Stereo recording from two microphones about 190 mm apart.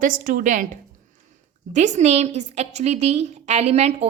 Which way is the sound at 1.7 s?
40° right (ahead or behind).